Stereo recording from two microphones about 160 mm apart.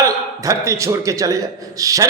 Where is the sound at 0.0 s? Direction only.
20° right (ahead or behind).